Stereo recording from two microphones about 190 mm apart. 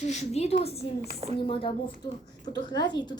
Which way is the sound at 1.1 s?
35° right (ahead or behind).